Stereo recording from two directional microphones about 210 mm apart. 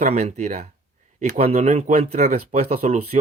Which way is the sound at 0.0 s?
30° right (ahead or behind).